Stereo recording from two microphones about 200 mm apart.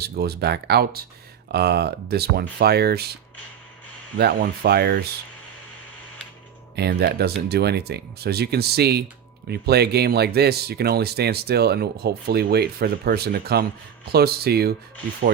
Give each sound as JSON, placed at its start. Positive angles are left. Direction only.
{"t": 0.0, "sound": "speech", "side_deg": -55}
{"t": 4.2, "sound": "speech", "side_deg": -50}
{"t": 6.7, "sound": "speech", "side_deg": -55}